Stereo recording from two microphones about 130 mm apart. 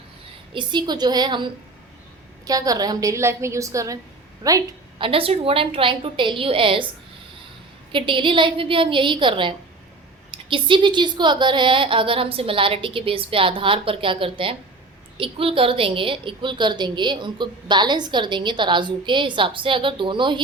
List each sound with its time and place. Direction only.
0.5 s a woman's voice: 35° right (ahead or behind)
2.5 s a woman's voice: 30° right (ahead or behind)
4.9 s a woman's voice: 45° right (ahead or behind)
7.9 s a woman's voice: 40° right (ahead or behind)